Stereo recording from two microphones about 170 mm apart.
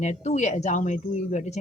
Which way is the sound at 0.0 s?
45° left (ahead or behind).